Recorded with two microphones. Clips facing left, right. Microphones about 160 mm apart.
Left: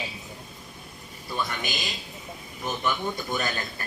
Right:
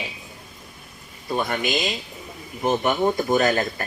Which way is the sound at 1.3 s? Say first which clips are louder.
Right 8 dB; 70° right (ahead or behind).